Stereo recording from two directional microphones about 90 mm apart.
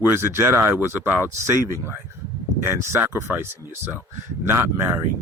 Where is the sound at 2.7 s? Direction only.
30° right (ahead or behind).